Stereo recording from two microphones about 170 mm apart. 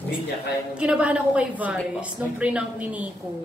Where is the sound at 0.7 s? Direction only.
5° right (ahead or behind).